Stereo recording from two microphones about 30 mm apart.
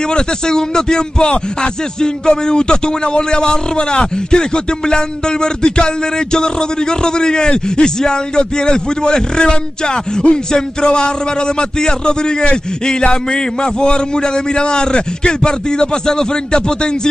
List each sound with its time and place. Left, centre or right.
0.1 s a man's voice: left
10.2 s speech: left
10.8 s a man's voice: left